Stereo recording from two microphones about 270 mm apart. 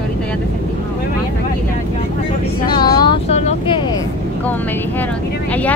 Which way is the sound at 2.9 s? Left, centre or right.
Centre.